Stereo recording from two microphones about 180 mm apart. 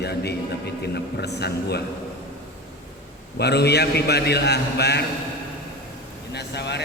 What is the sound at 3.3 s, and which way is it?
A man's voice, 65° left (ahead or behind).